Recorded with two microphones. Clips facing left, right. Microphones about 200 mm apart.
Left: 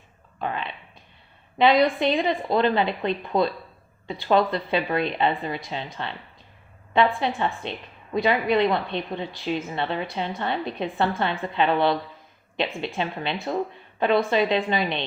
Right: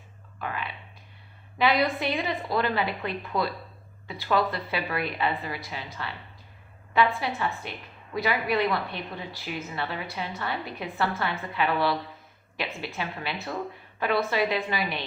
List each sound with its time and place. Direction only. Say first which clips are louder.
0.3 s whispering: left 4 dB; 25° left (ahead or behind)
1.5 s a woman's voice: left 5 dB; 20° left (ahead or behind)
7.2 s a woman's voice: left 4 dB; 25° left (ahead or behind)